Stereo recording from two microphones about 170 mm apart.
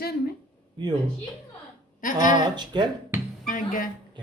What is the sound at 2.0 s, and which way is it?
Speech, 50° left (ahead or behind).